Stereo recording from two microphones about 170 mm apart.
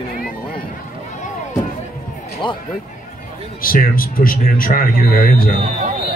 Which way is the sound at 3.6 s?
55° left (ahead or behind).